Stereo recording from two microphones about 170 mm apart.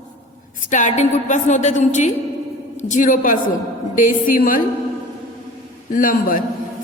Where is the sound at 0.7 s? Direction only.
45° left (ahead or behind).